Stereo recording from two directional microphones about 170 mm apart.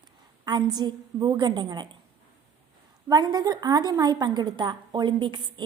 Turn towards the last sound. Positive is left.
turn(degrees=-25)  # may be behind; listen again after turning